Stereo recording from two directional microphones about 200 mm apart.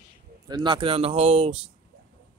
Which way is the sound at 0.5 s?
20° right (ahead or behind).